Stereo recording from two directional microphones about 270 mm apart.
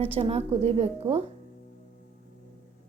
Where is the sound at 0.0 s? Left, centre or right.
Right.